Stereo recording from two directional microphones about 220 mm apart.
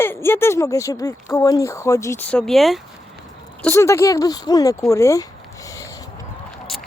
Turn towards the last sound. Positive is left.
turn(degrees=15)  # may be behind; listen again after turning